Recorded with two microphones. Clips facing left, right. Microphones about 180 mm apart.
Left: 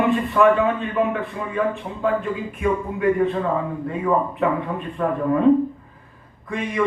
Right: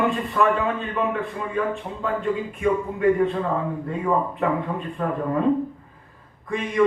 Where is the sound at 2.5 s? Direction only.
60° left (ahead or behind).